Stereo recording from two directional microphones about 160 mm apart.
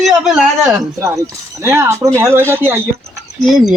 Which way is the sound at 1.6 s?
15° right (ahead or behind).